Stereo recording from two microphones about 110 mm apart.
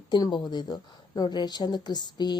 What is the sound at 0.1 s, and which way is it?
A woman's voice, 45° left (ahead or behind).